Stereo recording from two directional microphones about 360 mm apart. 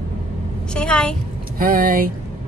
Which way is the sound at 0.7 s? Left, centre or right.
Centre.